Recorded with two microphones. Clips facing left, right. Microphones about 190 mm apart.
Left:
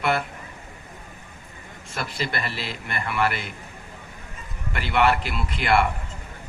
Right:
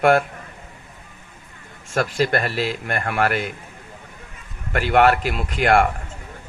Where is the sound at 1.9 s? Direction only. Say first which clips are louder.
Right 9 dB; 45° right (ahead or behind).